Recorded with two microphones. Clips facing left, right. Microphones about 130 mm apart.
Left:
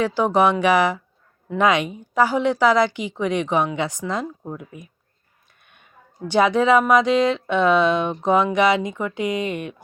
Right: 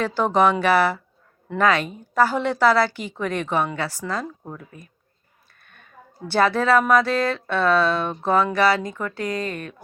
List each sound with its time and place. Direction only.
0.0 s speech: 10° left (ahead or behind)
5.5 s a sound: 15° left (ahead or behind)
6.2 s speech: 15° left (ahead or behind)